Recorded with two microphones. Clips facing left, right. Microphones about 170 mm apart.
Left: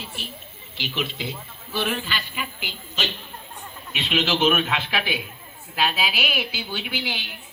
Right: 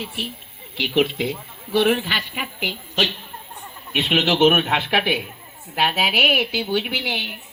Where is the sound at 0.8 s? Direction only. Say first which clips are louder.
Right 10 dB; 70° right (ahead or behind).